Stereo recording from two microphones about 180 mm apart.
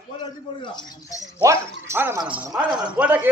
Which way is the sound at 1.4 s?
15° right (ahead or behind).